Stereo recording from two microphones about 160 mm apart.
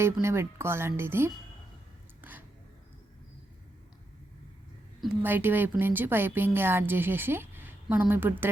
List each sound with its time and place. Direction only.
0.0 s a woman's voice: 15° right (ahead or behind)
2.2 s a sound: 10° right (ahead or behind)
5.2 s a woman's voice: 15° right (ahead or behind)